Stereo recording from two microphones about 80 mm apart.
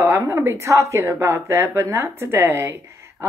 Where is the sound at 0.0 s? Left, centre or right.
Right.